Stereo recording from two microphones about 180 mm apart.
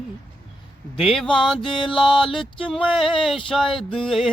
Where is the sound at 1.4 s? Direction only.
Centre (ahead or behind).